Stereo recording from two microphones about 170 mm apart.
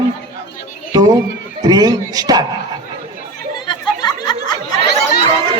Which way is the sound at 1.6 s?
25° right (ahead or behind).